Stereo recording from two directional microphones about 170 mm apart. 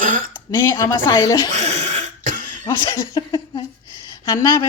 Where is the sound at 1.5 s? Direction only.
40° right (ahead or behind).